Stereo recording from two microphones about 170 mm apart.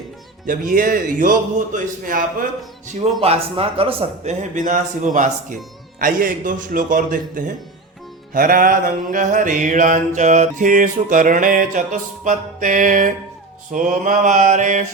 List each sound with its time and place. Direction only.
0.4 s music: 55° right (ahead or behind)
2.8 s a man's voice: 40° right (ahead or behind)
6.0 s music: 55° right (ahead or behind)